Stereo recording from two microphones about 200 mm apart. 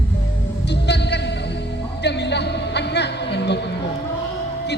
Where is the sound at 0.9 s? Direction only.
60° left (ahead or behind).